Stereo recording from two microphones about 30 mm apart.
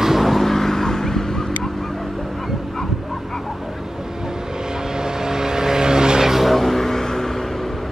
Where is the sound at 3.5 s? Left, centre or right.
Centre.